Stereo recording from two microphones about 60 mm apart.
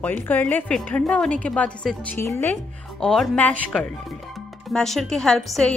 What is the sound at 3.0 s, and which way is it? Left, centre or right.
Speech, centre.